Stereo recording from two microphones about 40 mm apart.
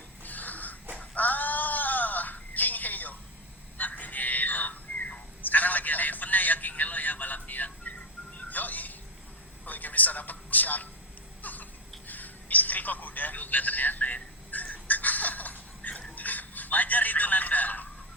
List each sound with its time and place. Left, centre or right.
0.2 s wheeze: left
0.9 s a sound: left
16.1 s telephone: left